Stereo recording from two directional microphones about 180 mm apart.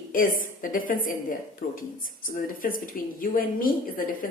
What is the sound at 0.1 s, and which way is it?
A woman's voice, 50° left (ahead or behind).